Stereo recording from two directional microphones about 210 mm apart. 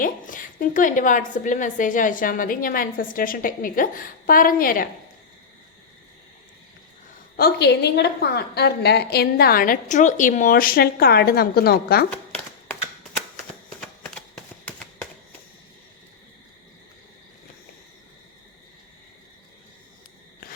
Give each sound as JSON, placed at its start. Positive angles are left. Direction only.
{"t": 0.0, "sound": "a woman's voice", "side_deg": 40}
{"t": 7.3, "sound": "a woman's voice", "side_deg": 50}
{"t": 13.8, "sound": "a sound", "side_deg": 5}